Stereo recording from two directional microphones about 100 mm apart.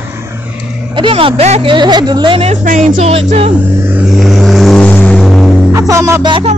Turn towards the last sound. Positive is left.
turn(degrees=-55)  # may be behind; listen again after turning